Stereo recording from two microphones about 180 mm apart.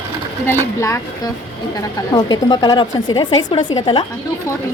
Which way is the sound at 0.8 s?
20° left (ahead or behind).